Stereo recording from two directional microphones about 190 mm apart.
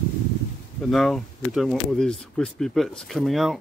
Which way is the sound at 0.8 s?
Centre (ahead or behind).